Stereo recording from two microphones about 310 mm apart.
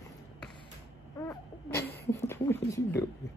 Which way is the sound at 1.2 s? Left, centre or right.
Centre.